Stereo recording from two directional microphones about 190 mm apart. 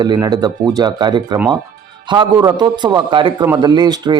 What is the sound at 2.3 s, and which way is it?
Speech, 20° right (ahead or behind).